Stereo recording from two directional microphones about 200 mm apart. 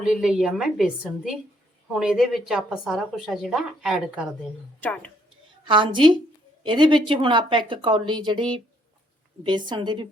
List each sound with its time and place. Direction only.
0.0 s a woman's voice: centre (ahead or behind)
4.8 s speech: 5° left (ahead or behind)
5.6 s a woman's voice: 25° right (ahead or behind)
9.6 s a woman's voice: 20° right (ahead or behind)